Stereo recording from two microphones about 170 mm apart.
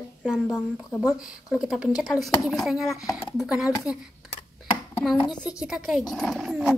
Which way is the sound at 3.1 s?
15° left (ahead or behind).